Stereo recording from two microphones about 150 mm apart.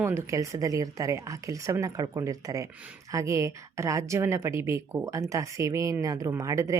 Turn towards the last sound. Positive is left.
turn(degrees=-20)  # may be behind; listen again after turning